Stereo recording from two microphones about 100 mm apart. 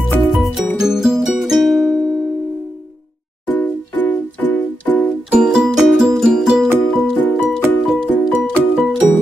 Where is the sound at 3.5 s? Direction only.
20° left (ahead or behind).